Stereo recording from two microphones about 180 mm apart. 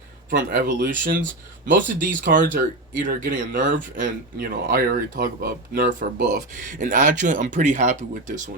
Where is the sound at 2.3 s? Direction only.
45° right (ahead or behind).